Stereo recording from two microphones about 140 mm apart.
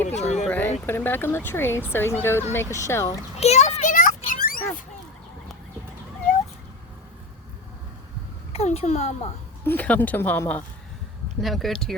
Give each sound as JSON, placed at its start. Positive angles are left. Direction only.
{"t": 0.0, "sound": "a sound", "side_deg": 55}
{"t": 0.4, "sound": "a sound", "side_deg": 10}
{"t": 0.9, "sound": "speech", "side_deg": 15}
{"t": 3.3, "sound": "children playing", "side_deg": 50}
{"t": 8.5, "sound": "a child's voice", "side_deg": 45}
{"t": 9.6, "sound": "speech", "side_deg": 10}
{"t": 11.3, "sound": "speech", "side_deg": 0}